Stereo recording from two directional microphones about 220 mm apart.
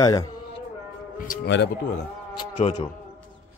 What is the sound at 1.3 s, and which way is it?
Speech, 50° left (ahead or behind).